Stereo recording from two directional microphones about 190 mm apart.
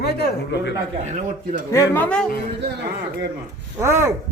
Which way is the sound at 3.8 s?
15° right (ahead or behind).